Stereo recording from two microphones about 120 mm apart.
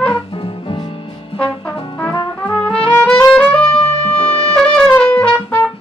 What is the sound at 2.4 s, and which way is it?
Trumpet, 10° left (ahead or behind).